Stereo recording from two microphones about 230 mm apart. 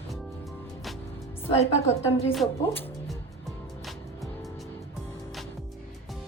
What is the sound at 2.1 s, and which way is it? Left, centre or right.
Speech, centre.